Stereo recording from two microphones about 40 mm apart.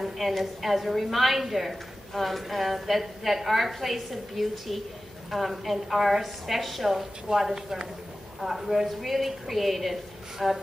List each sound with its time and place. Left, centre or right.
0.0 s a woman's voice: centre